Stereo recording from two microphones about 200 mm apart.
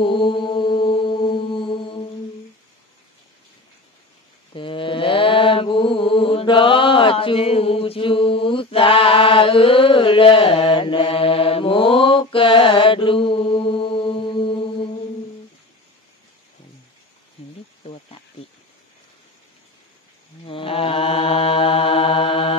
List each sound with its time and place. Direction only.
0.0 s mantra: 25° left (ahead or behind)
4.6 s mantra: 25° left (ahead or behind)
20.4 s mantra: 25° left (ahead or behind)